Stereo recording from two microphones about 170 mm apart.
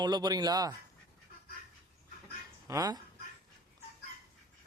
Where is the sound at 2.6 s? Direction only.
20° right (ahead or behind).